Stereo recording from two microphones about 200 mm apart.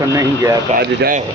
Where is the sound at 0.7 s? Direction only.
50° right (ahead or behind).